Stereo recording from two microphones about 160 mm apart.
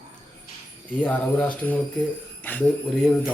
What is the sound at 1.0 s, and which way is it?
Speech, 10° left (ahead or behind).